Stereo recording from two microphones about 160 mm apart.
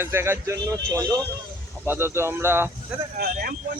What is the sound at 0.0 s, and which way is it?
Speech, 15° right (ahead or behind).